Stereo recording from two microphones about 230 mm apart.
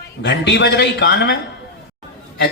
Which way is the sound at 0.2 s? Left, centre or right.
Left.